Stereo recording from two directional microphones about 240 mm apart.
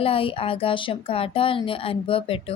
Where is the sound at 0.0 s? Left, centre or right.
Left.